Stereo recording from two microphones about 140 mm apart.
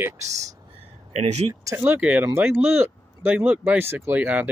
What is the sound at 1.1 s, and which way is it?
Speech, 55° right (ahead or behind).